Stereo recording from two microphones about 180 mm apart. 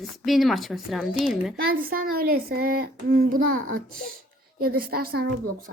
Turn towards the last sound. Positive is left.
turn(degrees=-60)  # may be behind; listen again after turning